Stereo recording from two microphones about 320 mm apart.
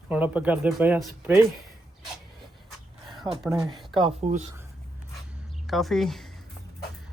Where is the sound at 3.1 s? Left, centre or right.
Centre.